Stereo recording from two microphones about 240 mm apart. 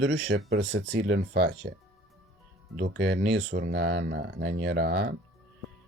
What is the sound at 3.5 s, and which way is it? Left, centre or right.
Speech, right.